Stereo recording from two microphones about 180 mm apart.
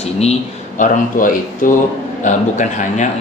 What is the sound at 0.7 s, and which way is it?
A man's voice, 50° left (ahead or behind).